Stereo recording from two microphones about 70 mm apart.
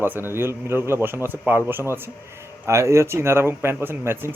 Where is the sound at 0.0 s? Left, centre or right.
Right.